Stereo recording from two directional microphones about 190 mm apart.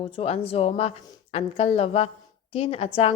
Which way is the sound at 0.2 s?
30° left (ahead or behind).